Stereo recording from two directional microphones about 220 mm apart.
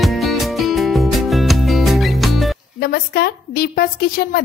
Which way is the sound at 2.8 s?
45° left (ahead or behind).